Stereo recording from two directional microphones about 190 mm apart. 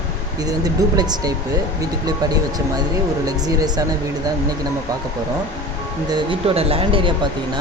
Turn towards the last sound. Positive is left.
turn(degrees=-30)  # may be behind; listen again after turning